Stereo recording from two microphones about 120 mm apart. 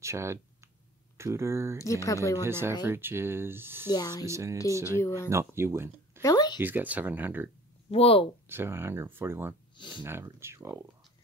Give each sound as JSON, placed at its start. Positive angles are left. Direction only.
{"t": 0.0, "sound": "speech", "side_deg": -25}
{"t": 1.8, "sound": "speech", "side_deg": 25}
{"t": 2.4, "sound": "speech", "side_deg": -20}
{"t": 3.9, "sound": "speech", "side_deg": 35}
{"t": 4.3, "sound": "speech", "side_deg": -25}
{"t": 5.0, "sound": "speech", "side_deg": 20}
{"t": 5.3, "sound": "speech", "side_deg": -20}
{"t": 6.2, "sound": "speech", "side_deg": 35}
{"t": 6.6, "sound": "speech", "side_deg": -15}
{"t": 7.9, "sound": "speech", "side_deg": 55}
{"t": 8.5, "sound": "speech", "side_deg": -20}
{"t": 9.8, "sound": "speech", "side_deg": 40}
{"t": 10.0, "sound": "speech", "side_deg": -20}